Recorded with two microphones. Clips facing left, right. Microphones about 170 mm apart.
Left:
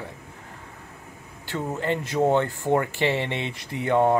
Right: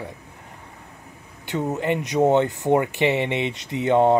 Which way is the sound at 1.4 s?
20° right (ahead or behind).